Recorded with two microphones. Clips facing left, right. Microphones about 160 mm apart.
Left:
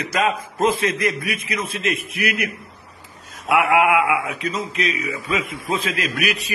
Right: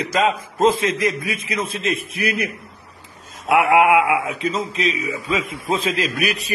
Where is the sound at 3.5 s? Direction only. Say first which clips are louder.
Right 2 dB; 30° right (ahead or behind).